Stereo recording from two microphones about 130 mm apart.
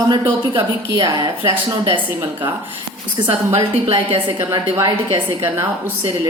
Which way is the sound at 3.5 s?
45° right (ahead or behind).